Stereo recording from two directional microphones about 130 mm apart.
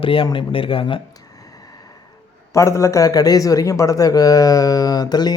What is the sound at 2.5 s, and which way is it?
Speech, 25° left (ahead or behind).